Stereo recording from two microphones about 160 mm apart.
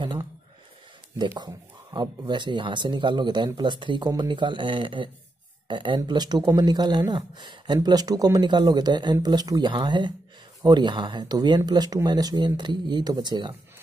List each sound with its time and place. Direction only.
0.0 s speech: 30° right (ahead or behind)
1.4 s speech: 25° right (ahead or behind)